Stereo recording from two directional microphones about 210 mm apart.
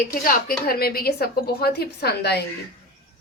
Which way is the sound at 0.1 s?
40° left (ahead or behind).